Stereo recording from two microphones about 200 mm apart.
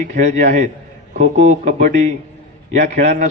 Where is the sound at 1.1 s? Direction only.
35° right (ahead or behind).